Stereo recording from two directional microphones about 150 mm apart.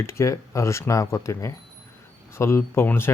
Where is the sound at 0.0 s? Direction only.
20° left (ahead or behind).